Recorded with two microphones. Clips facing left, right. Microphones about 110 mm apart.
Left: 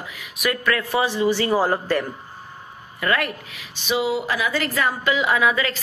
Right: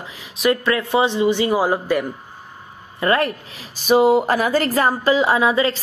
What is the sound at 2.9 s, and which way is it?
Speech, 35° right (ahead or behind).